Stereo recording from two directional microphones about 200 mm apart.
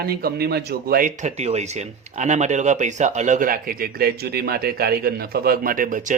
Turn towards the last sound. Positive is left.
turn(degrees=-40)  # may be behind; listen again after turning